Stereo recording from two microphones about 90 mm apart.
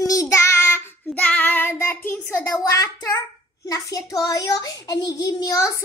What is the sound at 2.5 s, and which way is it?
A child's voice, 35° left (ahead or behind).